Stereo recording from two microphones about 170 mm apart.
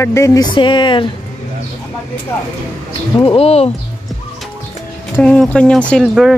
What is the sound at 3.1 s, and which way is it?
Speech, 35° left (ahead or behind).